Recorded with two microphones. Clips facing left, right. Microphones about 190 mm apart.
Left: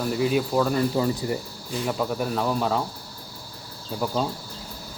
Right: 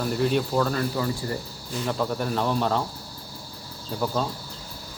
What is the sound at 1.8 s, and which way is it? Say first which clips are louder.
Cricket: even; 5° left (ahead or behind).